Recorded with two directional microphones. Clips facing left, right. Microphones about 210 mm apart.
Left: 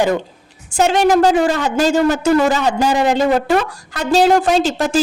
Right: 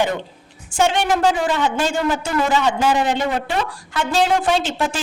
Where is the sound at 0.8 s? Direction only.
40° left (ahead or behind).